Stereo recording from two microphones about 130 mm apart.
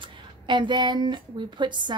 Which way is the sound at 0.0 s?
40° right (ahead or behind).